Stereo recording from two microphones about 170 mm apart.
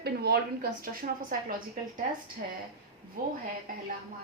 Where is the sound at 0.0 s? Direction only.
70° right (ahead or behind).